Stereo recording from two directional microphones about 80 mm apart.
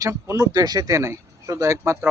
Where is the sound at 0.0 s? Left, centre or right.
Right.